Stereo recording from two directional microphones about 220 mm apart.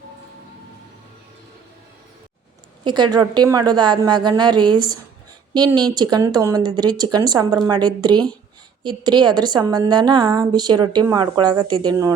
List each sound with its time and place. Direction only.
2.8 s a woman's voice: 20° right (ahead or behind)